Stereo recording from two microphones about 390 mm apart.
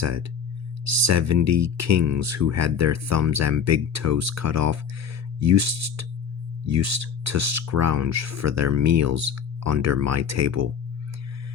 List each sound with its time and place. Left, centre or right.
0.0 s speech: right